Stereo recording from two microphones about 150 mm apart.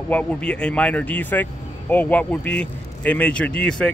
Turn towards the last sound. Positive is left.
turn(degrees=5)  # may be behind; listen again after turning